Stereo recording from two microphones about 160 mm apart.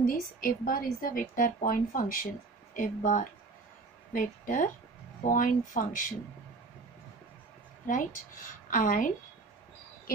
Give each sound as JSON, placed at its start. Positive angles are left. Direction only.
{"t": 0.0, "sound": "speech", "side_deg": 65}
{"t": 7.8, "sound": "speech", "side_deg": 55}